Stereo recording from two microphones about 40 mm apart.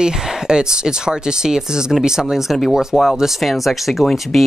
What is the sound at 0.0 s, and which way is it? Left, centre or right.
Speech, centre.